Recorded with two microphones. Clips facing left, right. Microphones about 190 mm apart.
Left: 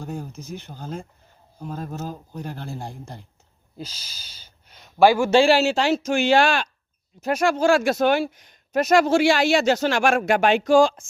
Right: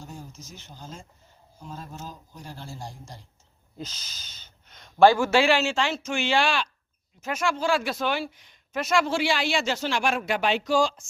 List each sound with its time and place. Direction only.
0.0 s speech: 60° left (ahead or behind)
3.8 s speech: 10° left (ahead or behind)
5.3 s speech: 30° left (ahead or behind); by 11.1 s 55° left (ahead or behind)